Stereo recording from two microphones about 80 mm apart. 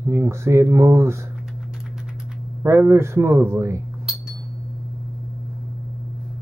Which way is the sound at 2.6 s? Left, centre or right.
Right.